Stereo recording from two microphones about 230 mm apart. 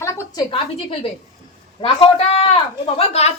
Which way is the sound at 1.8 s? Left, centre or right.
Left.